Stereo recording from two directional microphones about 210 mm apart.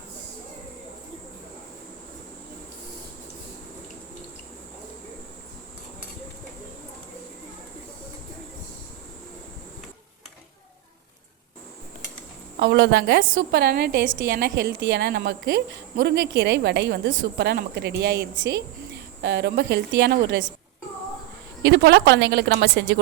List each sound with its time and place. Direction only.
12.5 s a woman's voice: 55° right (ahead or behind)
21.6 s a woman's voice: 60° right (ahead or behind)